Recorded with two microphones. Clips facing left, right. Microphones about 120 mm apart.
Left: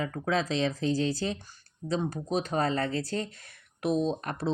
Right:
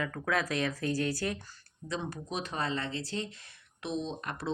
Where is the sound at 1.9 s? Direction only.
35° left (ahead or behind).